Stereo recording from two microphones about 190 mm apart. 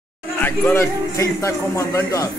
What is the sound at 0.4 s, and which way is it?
A man's voice, 10° left (ahead or behind).